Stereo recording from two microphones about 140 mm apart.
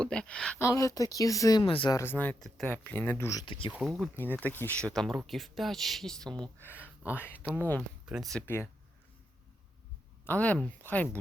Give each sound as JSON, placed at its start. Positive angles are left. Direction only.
{"t": 0.0, "sound": "speech", "side_deg": 5}
{"t": 0.6, "sound": "speech", "side_deg": 20}
{"t": 1.6, "sound": "speech", "side_deg": 40}
{"t": 1.9, "sound": "speech", "side_deg": 20}
{"t": 3.4, "sound": "speech", "side_deg": 35}
{"t": 3.7, "sound": "speech", "side_deg": -5}
{"t": 4.2, "sound": "speech", "side_deg": 15}
{"t": 6.4, "sound": "speech", "side_deg": 15}
{"t": 10.2, "sound": "speech", "side_deg": 10}